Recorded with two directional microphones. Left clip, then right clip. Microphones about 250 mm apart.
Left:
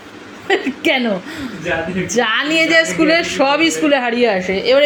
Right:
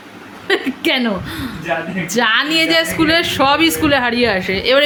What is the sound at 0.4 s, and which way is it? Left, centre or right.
A woman's voice, centre.